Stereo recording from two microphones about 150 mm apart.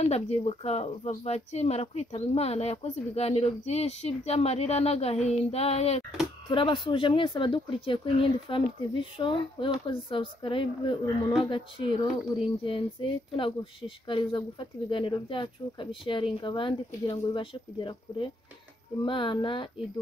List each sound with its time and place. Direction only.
0.0 s speech: 45° left (ahead or behind)